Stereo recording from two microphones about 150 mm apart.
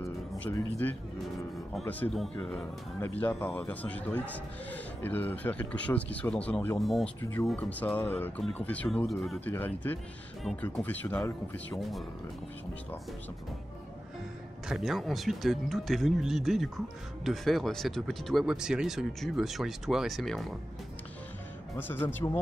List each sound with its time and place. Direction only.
0.5 s a man's voice: 15° left (ahead or behind)
2.1 s a man's voice: 5° left (ahead or behind)
7.2 s a man's voice: 15° left (ahead or behind)
9.4 s a man's voice: 10° left (ahead or behind)
14.7 s speech: centre (ahead or behind)
21.7 s a man's voice: 15° left (ahead or behind)